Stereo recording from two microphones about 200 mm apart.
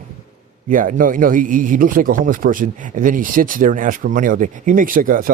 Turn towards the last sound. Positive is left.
turn(degrees=-45)  # may be behind; listen again after turning